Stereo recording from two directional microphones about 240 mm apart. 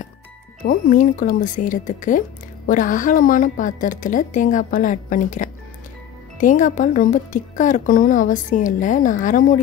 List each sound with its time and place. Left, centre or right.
0.7 s speech: left